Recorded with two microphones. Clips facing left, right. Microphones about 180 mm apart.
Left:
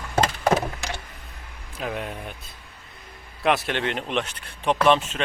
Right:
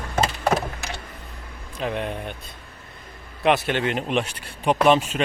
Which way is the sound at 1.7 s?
5° left (ahead or behind).